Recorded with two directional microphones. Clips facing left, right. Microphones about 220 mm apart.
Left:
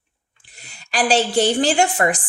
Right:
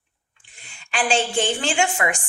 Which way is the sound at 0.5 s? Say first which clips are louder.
Left 4 dB; 40° left (ahead or behind).